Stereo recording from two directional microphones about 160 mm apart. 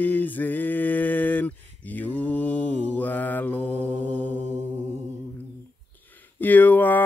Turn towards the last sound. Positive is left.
turn(degrees=10)  # may be behind; listen again after turning